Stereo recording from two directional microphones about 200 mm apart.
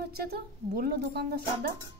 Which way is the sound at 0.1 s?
50° right (ahead or behind).